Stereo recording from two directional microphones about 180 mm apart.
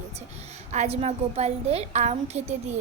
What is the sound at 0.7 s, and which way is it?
A woman's voice, 35° right (ahead or behind).